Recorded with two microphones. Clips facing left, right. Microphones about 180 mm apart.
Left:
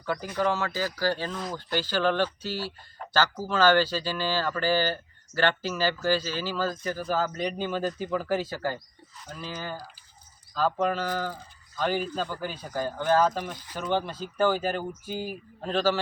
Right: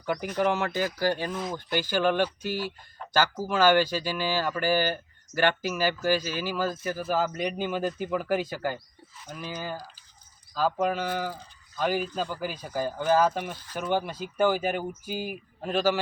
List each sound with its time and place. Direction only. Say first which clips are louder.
0.0 s speech: right 1 dB; 15° right (ahead or behind)